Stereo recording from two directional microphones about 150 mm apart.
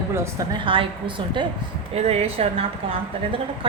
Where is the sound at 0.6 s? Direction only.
35° right (ahead or behind).